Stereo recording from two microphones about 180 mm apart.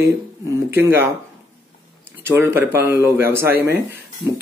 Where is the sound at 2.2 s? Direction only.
15° right (ahead or behind).